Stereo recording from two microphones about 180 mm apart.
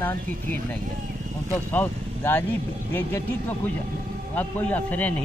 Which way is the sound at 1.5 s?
10° left (ahead or behind).